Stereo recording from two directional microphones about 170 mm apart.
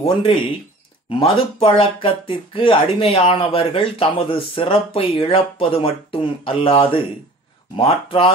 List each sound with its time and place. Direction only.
0.0 s speech: 30° left (ahead or behind)